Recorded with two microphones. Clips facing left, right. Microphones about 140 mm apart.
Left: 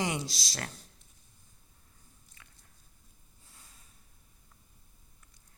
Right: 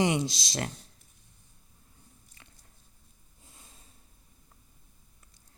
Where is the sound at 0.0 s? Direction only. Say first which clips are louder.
Right 7 dB; 20° right (ahead or behind).